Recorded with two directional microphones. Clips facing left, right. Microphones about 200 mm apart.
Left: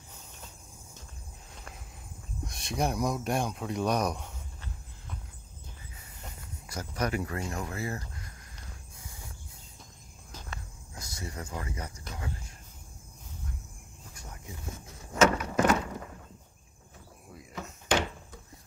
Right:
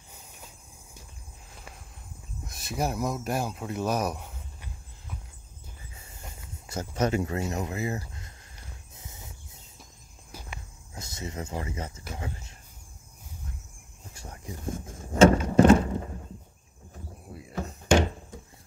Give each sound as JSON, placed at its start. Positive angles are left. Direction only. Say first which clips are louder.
{"t": 1.5, "sound": "walk", "louder": "even", "side_deg": -5}
{"t": 2.4, "sound": "speech", "louder": "even", "side_deg": -5}
{"t": 6.7, "sound": "speech", "louder": "right 5 dB", "side_deg": -25}
{"t": 8.9, "sound": "cricket", "louder": "right 2 dB", "side_deg": -20}
{"t": 11.0, "sound": "speech", "louder": "right 4 dB", "side_deg": -20}
{"t": 14.1, "sound": "a sound", "louder": "right 5 dB", "side_deg": -30}
{"t": 14.7, "sound": "vehicle", "louder": "right 12 dB", "side_deg": -50}
{"t": 15.1, "sound": "vehicle", "louder": "right 6 dB", "side_deg": -30}
{"t": 15.5, "sound": "a sound", "louder": "right 8 dB", "side_deg": -30}
{"t": 17.3, "sound": "a sound", "louder": "right 6 dB", "side_deg": -35}